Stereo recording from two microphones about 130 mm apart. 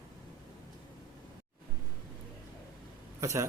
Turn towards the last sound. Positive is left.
turn(degrees=-20)  # may be behind; listen again after turning